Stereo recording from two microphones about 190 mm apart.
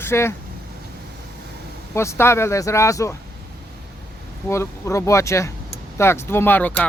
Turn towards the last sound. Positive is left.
turn(degrees=10)  # may be behind; listen again after turning